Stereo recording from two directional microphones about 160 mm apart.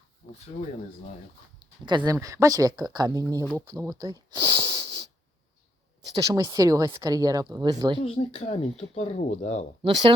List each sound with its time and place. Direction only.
1.5 s a sound: 30° right (ahead or behind)
2.1 s speech: 20° right (ahead or behind)
4.3 s wheeze: 30° right (ahead or behind)
6.2 s speech: 25° right (ahead or behind)
8.0 s speech: 35° left (ahead or behind)
9.8 s speech: 30° right (ahead or behind)